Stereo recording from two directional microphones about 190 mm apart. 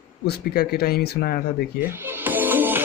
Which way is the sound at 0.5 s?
55° left (ahead or behind).